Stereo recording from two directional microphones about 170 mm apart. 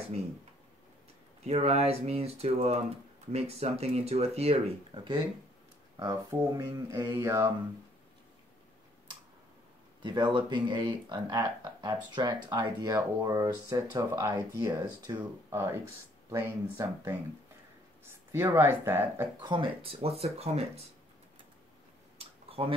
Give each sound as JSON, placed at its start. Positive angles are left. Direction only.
{"t": 1.4, "sound": "speech", "side_deg": -40}
{"t": 10.0, "sound": "speech", "side_deg": -25}
{"t": 18.3, "sound": "speech", "side_deg": -15}
{"t": 19.4, "sound": "speech", "side_deg": -30}
{"t": 22.5, "sound": "a sound", "side_deg": -35}